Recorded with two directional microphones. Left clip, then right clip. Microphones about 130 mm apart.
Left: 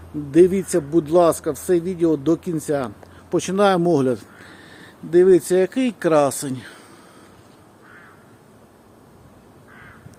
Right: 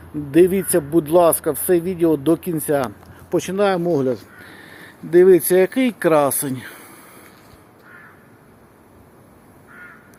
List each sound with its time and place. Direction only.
0.3 s speech: 10° left (ahead or behind)
3.5 s speech: 50° left (ahead or behind)
4.5 s speech: centre (ahead or behind)